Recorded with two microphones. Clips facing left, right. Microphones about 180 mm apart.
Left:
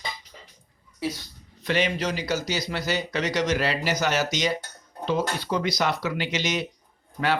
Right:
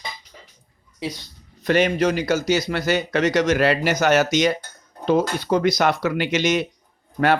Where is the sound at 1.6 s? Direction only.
50° right (ahead or behind).